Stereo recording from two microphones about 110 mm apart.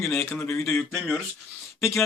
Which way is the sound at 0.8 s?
5° left (ahead or behind).